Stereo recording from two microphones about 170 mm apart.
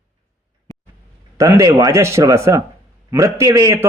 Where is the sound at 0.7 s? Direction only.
15° left (ahead or behind).